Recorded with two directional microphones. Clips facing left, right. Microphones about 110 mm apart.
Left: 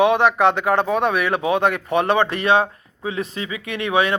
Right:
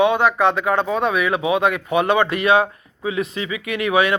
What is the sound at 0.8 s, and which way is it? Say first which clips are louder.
Speech: left 1 dB; 55° left (ahead or behind).